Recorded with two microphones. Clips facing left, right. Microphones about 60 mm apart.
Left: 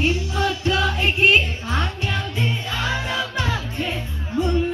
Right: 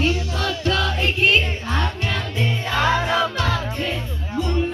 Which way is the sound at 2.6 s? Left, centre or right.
Right.